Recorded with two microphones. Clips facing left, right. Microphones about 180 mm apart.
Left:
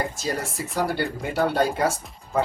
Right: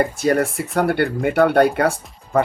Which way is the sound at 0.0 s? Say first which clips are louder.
Right 10 dB; 60° right (ahead or behind).